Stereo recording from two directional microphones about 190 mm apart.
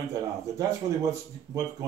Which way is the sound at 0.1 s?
20° right (ahead or behind).